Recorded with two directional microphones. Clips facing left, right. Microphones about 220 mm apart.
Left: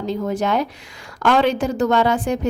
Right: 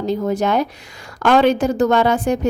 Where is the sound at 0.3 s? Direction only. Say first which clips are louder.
Right 2 dB; 45° right (ahead or behind).